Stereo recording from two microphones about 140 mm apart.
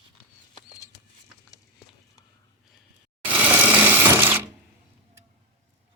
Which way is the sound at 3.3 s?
10° right (ahead or behind).